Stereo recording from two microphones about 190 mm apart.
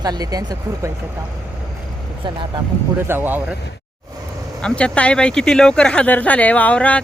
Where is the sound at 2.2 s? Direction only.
25° right (ahead or behind).